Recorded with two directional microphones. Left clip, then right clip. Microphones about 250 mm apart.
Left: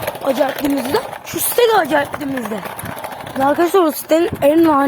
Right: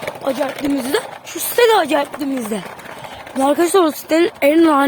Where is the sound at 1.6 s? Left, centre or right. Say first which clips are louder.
Right 1 dB; centre.